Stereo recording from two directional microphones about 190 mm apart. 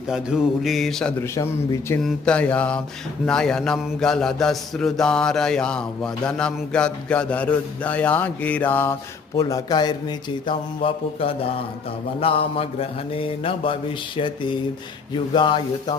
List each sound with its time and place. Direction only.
0.6 s mantra: centre (ahead or behind); by 16.0 s 25° left (ahead or behind)